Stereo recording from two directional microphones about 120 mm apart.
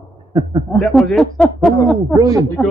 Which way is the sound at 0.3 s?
35° right (ahead or behind).